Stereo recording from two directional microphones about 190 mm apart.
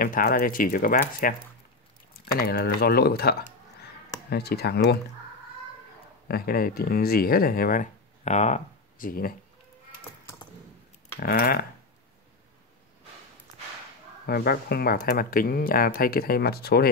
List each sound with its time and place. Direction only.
0.0 s speech: 50° left (ahead or behind)
2.3 s speech: 55° left (ahead or behind)
6.2 s speech: 50° left (ahead or behind)
11.1 s speech: 50° left (ahead or behind)
14.2 s speech: 55° left (ahead or behind)